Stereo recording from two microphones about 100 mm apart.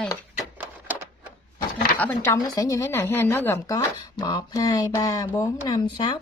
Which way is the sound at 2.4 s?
40° left (ahead or behind).